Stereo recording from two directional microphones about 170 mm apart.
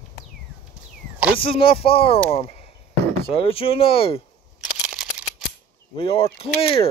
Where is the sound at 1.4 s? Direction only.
30° left (ahead or behind).